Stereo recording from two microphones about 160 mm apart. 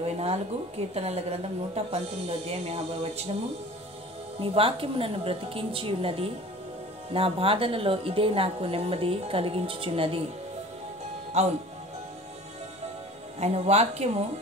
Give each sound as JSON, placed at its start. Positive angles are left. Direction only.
{"t": 0.0, "sound": "a woman's voice", "side_deg": -40}
{"t": 4.4, "sound": "a woman's voice", "side_deg": -35}
{"t": 11.4, "sound": "speech", "side_deg": -45}
{"t": 13.4, "sound": "speech", "side_deg": -40}